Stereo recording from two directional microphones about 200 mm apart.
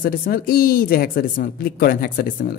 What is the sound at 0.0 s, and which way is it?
A woman's voice, 50° left (ahead or behind).